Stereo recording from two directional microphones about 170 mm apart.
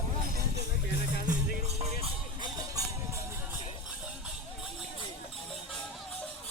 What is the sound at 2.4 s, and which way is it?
Music, 20° right (ahead or behind).